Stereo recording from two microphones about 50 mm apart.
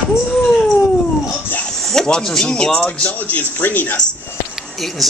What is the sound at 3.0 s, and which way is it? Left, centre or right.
Speech, left.